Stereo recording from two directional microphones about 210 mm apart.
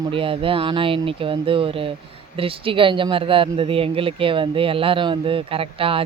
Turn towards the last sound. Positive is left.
turn(degrees=-25)  # may be behind; listen again after turning